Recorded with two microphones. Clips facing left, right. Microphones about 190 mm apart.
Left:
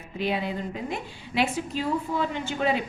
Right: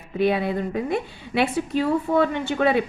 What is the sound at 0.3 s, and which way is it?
A woman's voice, 60° right (ahead or behind).